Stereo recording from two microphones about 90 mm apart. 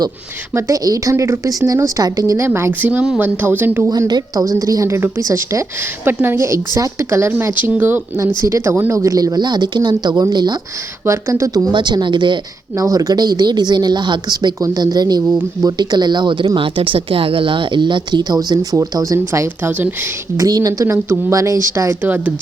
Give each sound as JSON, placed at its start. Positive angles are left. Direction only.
{"t": 0.5, "sound": "a woman's voice", "side_deg": -40}
{"t": 2.4, "sound": "speech", "side_deg": -25}
{"t": 3.8, "sound": "a woman's voice", "side_deg": -45}
{"t": 8.4, "sound": "a woman's voice", "side_deg": -35}
{"t": 11.0, "sound": "a woman's voice", "side_deg": -30}
{"t": 11.7, "sound": "a woman's voice", "side_deg": -55}
{"t": 12.7, "sound": "a woman's voice", "side_deg": -40}
{"t": 16.6, "sound": "a woman's voice", "side_deg": -75}
{"t": 19.3, "sound": "speech", "side_deg": -25}
{"t": 20.3, "sound": "a woman's voice", "side_deg": -40}
{"t": 20.8, "sound": "a woman's voice", "side_deg": -30}
{"t": 22.0, "sound": "a woman's voice", "side_deg": -20}